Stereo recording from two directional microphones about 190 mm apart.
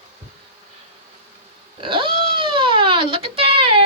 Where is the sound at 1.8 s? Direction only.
25° right (ahead or behind).